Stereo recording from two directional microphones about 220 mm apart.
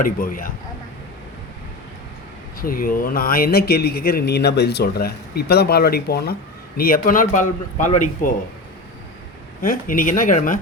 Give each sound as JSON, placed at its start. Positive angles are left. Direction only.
{"t": 0.0, "sound": "speech", "side_deg": 40}
{"t": 2.6, "sound": "speech", "side_deg": 40}
{"t": 9.6, "sound": "speech", "side_deg": 40}